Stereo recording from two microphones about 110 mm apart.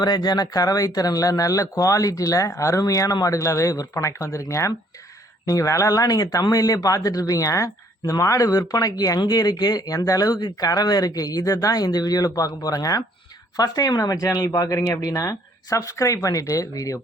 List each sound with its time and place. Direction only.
0.0 s speech: 40° left (ahead or behind)